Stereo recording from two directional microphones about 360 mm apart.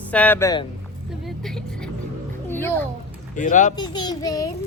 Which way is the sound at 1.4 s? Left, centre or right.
Centre.